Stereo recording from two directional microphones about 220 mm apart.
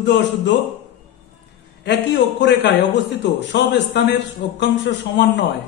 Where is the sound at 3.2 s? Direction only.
50° left (ahead or behind).